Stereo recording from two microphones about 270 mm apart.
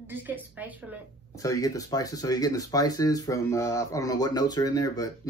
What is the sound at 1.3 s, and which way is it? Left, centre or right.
Speech, centre.